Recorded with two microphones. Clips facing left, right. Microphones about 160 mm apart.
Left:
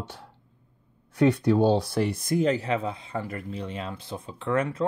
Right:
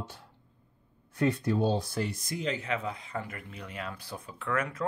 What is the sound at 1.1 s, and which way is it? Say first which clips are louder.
Speech: left 7 dB; 80° left.